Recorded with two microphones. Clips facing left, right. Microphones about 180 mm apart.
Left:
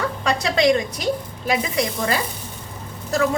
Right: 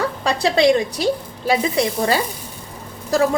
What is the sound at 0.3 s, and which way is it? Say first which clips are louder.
A woman's voice: right 3 dB; 30° right (ahead or behind).